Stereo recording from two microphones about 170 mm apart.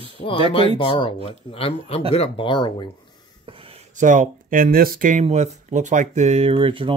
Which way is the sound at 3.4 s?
35° right (ahead or behind).